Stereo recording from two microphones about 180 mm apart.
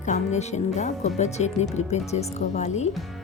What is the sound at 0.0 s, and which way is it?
A woman's voice, 40° left (ahead or behind).